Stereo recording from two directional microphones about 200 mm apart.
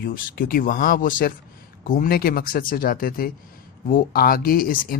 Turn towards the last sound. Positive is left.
turn(degrees=45)  # may be behind; listen again after turning